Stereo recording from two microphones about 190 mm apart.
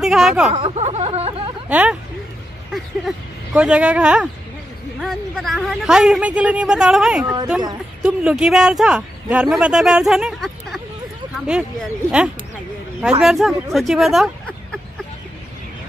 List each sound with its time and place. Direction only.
0.0 s speech: centre (ahead or behind)
0.5 s a sound: 30° right (ahead or behind)
1.7 s speech: 5° right (ahead or behind)